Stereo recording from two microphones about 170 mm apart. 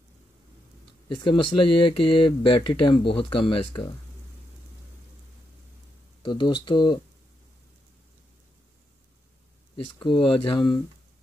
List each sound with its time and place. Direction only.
1.0 s speech: 30° left (ahead or behind)
6.2 s speech: 30° left (ahead or behind)
9.9 s speech: 30° left (ahead or behind)